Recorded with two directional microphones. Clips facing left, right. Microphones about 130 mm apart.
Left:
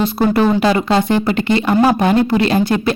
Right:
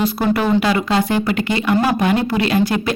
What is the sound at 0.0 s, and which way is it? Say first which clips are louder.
Speech: left 3 dB; 25° left (ahead or behind).